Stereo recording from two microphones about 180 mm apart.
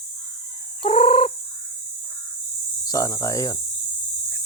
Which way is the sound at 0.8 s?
30° left (ahead or behind).